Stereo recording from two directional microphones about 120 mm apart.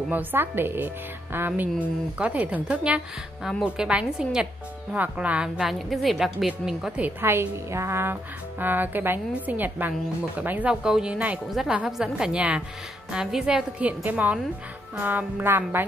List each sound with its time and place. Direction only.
0.1 s a woman's voice: 15° right (ahead or behind)
7.2 s speech: 20° right (ahead or behind)